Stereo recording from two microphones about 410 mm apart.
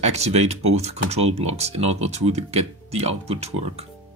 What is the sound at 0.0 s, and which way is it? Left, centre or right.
Speech, centre.